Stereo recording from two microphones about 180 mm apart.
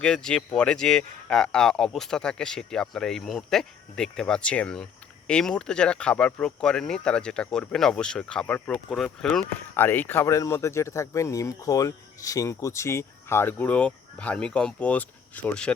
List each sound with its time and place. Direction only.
0.0 s speech: 5° left (ahead or behind)